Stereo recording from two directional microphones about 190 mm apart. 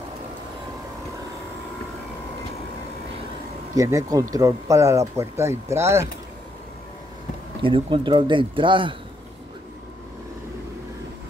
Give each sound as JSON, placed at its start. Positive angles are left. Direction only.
{"t": 3.7, "sound": "speech", "side_deg": -15}
{"t": 7.6, "sound": "speech", "side_deg": -25}